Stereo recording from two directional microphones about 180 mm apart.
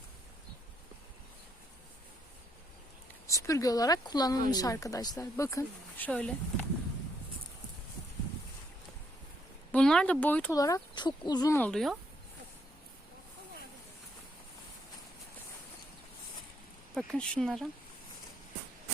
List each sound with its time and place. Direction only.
3.2 s speech: 15° left (ahead or behind)
9.7 s speech: 5° left (ahead or behind)
10.5 s speech: 20° left (ahead or behind)
11.7 s speech: centre (ahead or behind)
16.9 s speech: 5° left (ahead or behind)